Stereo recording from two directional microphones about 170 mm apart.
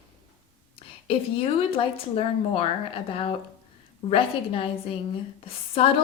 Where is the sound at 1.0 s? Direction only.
35° left (ahead or behind).